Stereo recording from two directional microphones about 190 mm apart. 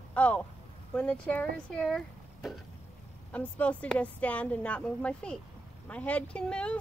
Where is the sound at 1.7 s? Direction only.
5° left (ahead or behind).